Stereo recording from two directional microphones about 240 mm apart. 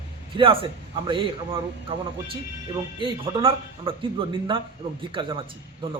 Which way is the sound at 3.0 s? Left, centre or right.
Right.